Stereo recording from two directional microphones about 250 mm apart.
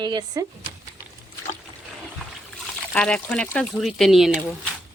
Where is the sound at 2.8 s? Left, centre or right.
Centre.